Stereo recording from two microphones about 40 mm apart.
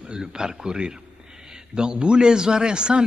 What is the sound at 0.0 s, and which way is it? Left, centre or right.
A man's voice, centre.